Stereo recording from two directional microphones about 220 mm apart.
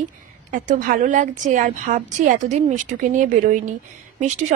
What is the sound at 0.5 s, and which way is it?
A woman's voice, 40° right (ahead or behind).